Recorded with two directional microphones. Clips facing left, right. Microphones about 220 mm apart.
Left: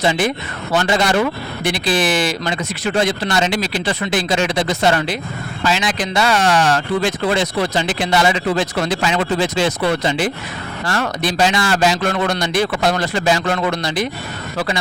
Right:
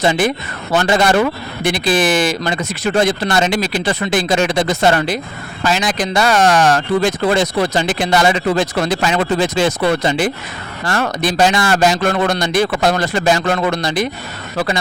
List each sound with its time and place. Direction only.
0.0 s speech: 45° right (ahead or behind)